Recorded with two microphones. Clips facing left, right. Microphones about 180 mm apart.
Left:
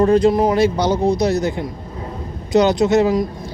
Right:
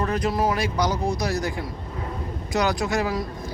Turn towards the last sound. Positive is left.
turn(degrees=20)  # may be behind; listen again after turning